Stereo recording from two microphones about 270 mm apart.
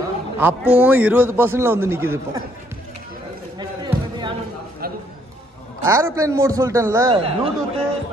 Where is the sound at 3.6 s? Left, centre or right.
Centre.